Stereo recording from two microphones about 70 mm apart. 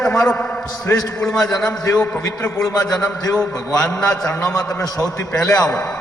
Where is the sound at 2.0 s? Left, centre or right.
Left.